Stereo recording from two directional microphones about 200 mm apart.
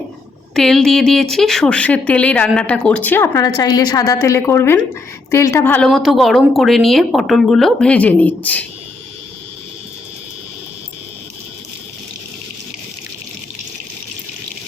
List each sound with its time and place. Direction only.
0.5 s a woman's voice: centre (ahead or behind)